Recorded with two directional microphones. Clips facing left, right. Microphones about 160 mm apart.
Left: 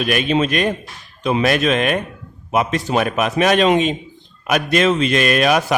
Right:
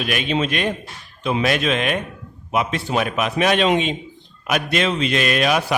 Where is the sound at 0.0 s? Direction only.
45° left (ahead or behind).